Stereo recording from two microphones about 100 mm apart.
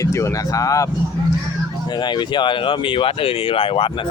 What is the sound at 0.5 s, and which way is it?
Speech, 35° left (ahead or behind).